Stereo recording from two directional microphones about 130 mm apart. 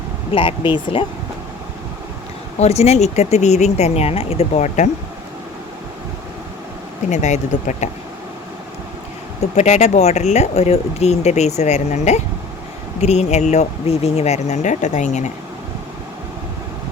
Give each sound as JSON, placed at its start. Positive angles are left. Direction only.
{"t": 0.3, "sound": "speech", "side_deg": 40}
{"t": 2.6, "sound": "speech", "side_deg": 55}
{"t": 7.1, "sound": "speech", "side_deg": 65}
{"t": 9.6, "sound": "speech", "side_deg": 60}